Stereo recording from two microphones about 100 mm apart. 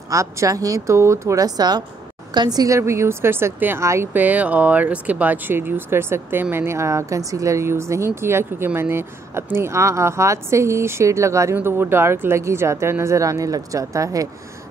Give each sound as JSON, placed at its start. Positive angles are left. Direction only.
{"t": 0.1, "sound": "a woman's voice", "side_deg": -30}
{"t": 4.1, "sound": "speech", "side_deg": -15}